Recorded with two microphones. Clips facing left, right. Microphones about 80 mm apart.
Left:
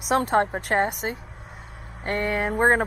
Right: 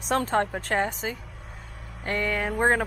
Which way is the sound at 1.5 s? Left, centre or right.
Left.